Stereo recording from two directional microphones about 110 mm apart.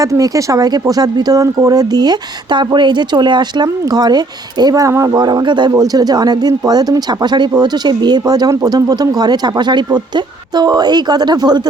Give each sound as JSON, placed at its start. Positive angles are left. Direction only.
{"t": 0.0, "sound": "speech", "side_deg": -30}